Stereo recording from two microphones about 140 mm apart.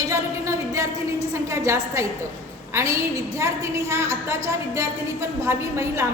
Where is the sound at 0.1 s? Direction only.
20° right (ahead or behind).